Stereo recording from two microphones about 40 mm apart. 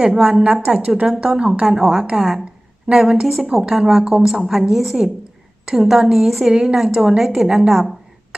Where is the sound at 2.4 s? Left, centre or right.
Centre.